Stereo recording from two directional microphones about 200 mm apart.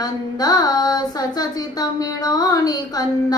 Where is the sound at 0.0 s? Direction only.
20° left (ahead or behind).